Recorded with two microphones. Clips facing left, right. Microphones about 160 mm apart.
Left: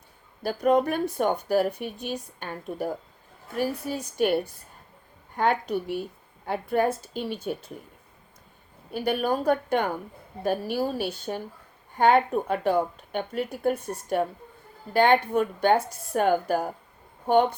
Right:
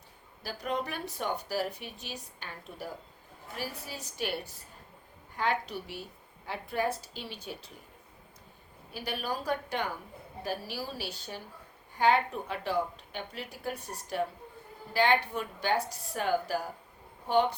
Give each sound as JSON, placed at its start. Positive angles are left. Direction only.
{"t": 0.4, "sound": "speech", "side_deg": 50}
{"t": 8.9, "sound": "speech", "side_deg": 55}